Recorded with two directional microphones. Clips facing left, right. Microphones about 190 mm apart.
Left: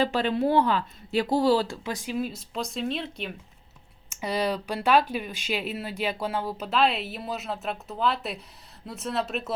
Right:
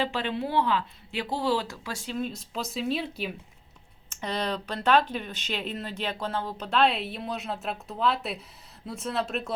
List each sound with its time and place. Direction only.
0.0 s speech: 40° left (ahead or behind); by 3.3 s 5° right (ahead or behind)
4.1 s speech: 10° left (ahead or behind)